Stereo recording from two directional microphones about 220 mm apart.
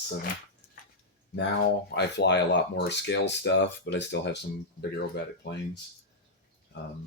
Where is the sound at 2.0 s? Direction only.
50° left (ahead or behind).